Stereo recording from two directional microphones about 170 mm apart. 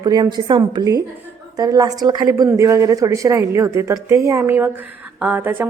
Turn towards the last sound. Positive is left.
turn(degrees=-10)  # may be behind; listen again after turning